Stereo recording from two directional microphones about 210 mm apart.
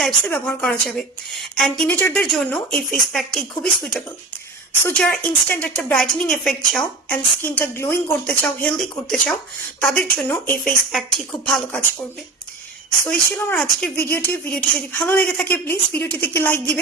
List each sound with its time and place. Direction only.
0.0 s a woman's voice: 5° left (ahead or behind)
13.1 s a woman's voice: 5° left (ahead or behind)